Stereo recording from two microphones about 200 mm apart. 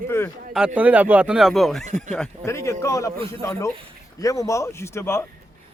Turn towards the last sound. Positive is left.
turn(degrees=10)  # may be behind; listen again after turning